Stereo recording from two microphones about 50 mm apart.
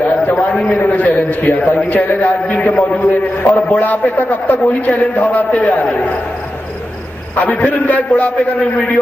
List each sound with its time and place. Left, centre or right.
0.0 s a man's voice: left
7.3 s a man's voice: left